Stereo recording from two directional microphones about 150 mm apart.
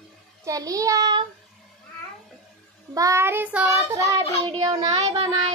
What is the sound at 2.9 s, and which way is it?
Child singing, 20° right (ahead or behind).